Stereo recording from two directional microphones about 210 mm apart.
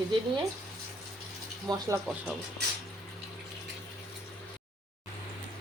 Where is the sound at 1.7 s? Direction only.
15° right (ahead or behind).